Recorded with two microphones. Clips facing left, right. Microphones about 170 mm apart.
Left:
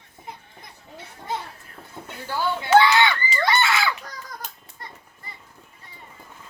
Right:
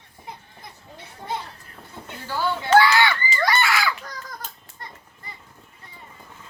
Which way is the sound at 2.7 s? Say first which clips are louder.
Left 1 dB; 20° left (ahead or behind).